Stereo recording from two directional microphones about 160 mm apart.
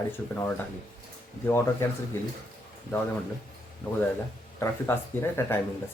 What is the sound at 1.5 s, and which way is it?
Speech, 15° left (ahead or behind).